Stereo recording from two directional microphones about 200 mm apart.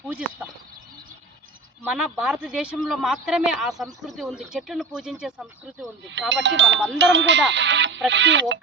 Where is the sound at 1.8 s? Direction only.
5° right (ahead or behind).